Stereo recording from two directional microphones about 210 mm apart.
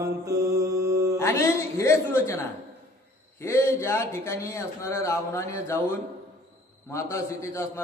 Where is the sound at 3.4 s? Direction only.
15° left (ahead or behind).